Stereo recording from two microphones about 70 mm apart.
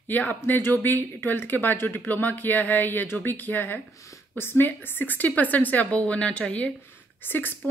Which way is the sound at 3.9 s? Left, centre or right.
Left.